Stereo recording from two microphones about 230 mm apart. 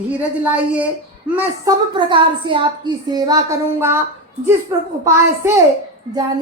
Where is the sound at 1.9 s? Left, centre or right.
Right.